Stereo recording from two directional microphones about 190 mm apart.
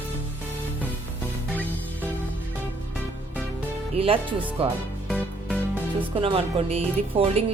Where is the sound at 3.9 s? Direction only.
30° right (ahead or behind).